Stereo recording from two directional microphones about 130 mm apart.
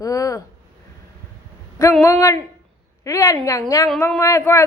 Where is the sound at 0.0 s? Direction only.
25° left (ahead or behind).